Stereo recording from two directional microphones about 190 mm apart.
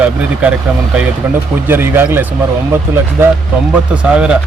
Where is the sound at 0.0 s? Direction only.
5° right (ahead or behind).